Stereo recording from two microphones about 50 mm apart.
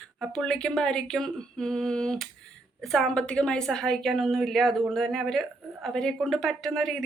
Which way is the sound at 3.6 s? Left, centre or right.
Centre.